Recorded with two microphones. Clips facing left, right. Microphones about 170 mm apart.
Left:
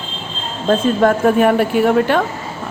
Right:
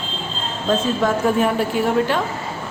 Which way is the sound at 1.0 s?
60° left (ahead or behind).